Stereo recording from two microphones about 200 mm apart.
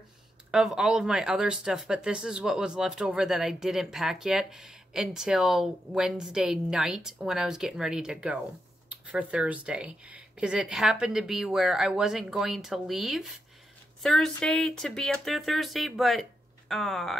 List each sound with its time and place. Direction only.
0.5 s speech: 5° right (ahead or behind)